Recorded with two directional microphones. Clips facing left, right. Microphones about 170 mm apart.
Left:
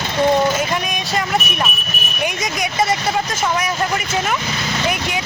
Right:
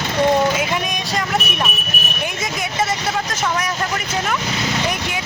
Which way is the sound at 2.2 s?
15° left (ahead or behind).